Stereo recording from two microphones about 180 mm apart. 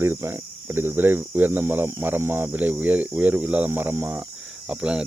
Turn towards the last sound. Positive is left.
turn(degrees=-5)  # may be behind; listen again after turning